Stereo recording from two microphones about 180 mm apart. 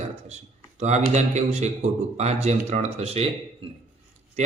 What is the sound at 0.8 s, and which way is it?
A man's voice, 40° right (ahead or behind).